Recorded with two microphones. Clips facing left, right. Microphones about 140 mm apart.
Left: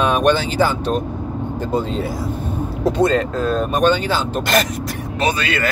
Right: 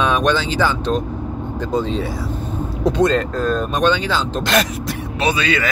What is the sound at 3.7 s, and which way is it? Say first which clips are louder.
Speech: left 2 dB; 50° left (ahead or behind).